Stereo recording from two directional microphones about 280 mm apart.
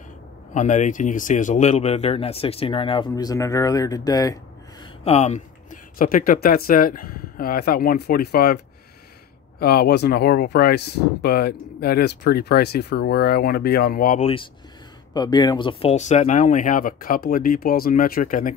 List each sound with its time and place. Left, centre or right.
0.6 s speech: left
9.6 s speech: left